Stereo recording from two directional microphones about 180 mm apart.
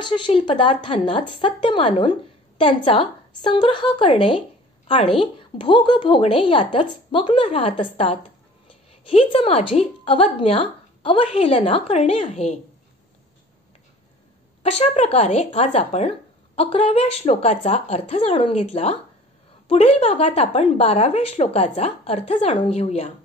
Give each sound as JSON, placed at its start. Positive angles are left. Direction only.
{"t": 0.0, "sound": "a woman's voice", "side_deg": 30}
{"t": 14.6, "sound": "a woman's voice", "side_deg": 35}